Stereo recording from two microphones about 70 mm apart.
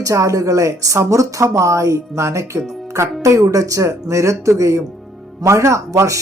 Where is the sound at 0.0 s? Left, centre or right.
Right.